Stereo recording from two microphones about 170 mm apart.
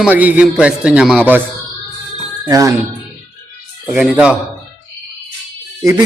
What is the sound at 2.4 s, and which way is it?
Speech, 20° right (ahead or behind).